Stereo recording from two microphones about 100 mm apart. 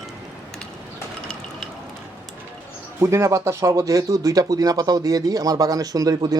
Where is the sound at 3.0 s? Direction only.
30° right (ahead or behind).